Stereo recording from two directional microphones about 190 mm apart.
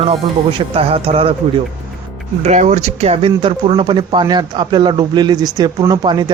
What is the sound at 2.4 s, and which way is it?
Speech, 35° right (ahead or behind).